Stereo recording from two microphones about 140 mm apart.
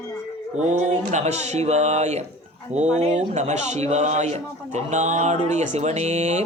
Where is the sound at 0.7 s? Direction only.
55° right (ahead or behind).